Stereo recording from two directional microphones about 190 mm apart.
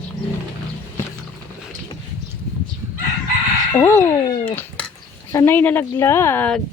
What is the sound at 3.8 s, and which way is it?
Speech, 15° left (ahead or behind).